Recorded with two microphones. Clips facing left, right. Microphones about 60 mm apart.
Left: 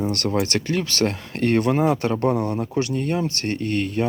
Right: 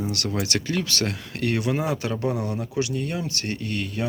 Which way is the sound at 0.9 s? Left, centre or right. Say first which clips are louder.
Left 5 dB; left.